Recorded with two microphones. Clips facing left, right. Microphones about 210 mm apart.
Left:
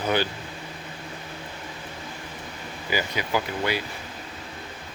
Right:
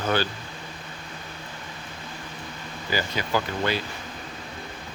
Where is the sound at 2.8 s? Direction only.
15° left (ahead or behind).